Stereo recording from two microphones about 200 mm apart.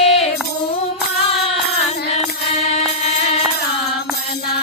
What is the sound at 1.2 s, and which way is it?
Music, 30° left (ahead or behind).